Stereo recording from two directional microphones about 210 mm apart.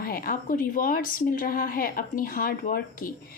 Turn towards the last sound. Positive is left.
turn(degrees=40)  # may be behind; listen again after turning